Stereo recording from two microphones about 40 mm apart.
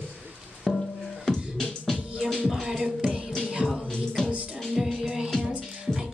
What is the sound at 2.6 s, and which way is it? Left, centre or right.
Music, centre.